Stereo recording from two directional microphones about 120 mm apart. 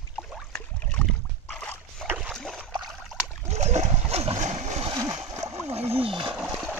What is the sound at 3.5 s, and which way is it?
Splash, 70° right (ahead or behind).